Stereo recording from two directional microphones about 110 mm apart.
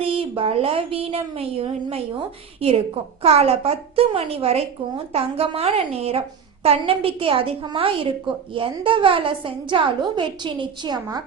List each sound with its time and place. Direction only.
0.0 s a woman's voice: 55° right (ahead or behind); by 11.2 s 40° right (ahead or behind)